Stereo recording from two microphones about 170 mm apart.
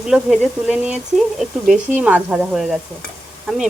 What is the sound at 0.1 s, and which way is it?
Speech, 5° right (ahead or behind).